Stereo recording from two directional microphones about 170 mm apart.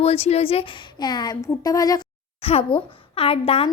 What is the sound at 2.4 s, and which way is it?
A child's voice, 35° left (ahead or behind).